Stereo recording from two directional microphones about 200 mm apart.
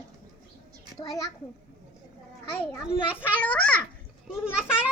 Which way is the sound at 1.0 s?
20° left (ahead or behind).